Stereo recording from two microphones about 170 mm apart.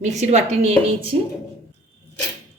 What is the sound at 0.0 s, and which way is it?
Speech, 40° right (ahead or behind).